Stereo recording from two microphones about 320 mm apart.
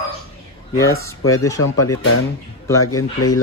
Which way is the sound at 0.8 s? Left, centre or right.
Centre.